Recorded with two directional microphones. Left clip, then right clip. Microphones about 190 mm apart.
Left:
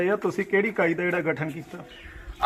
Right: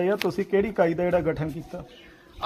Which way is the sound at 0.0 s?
60° right (ahead or behind).